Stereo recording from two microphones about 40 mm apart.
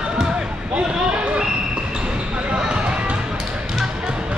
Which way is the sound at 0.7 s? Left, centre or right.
Right.